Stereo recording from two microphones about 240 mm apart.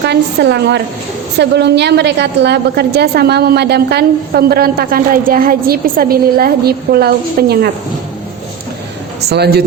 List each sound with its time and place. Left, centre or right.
0.1 s a woman's voice: right
9.2 s a woman's voice: right